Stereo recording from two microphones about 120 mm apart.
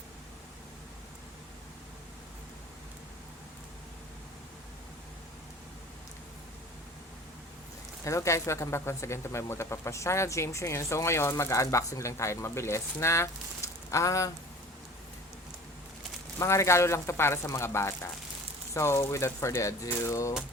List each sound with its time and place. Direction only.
8.0 s speech: 25° left (ahead or behind)
16.4 s speech: 25° left (ahead or behind)